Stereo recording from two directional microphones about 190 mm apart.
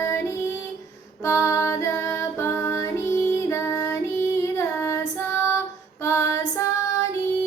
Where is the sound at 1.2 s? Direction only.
15° left (ahead or behind).